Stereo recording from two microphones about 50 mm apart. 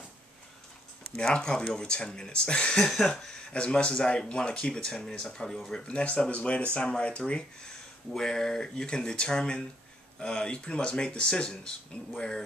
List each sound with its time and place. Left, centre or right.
1.1 s speech: centre
8.1 s speech: centre